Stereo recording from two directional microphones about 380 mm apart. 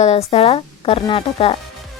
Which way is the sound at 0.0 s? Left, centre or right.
Centre.